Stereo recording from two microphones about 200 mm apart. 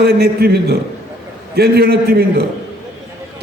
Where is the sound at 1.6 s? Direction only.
55° right (ahead or behind).